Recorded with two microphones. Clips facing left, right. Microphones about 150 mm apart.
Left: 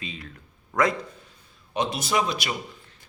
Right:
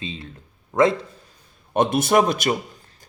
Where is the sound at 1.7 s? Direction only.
55° right (ahead or behind).